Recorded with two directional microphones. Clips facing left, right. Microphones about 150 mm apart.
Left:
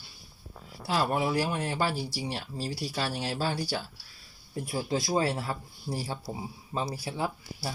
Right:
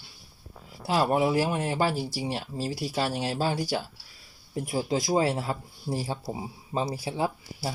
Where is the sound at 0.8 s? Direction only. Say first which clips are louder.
Right 4 dB; 20° right (ahead or behind).